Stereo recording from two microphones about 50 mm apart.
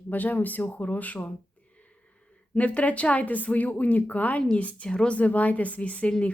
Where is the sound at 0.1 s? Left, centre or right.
Left.